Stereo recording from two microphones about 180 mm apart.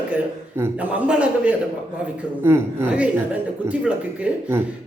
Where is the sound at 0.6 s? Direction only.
10° right (ahead or behind).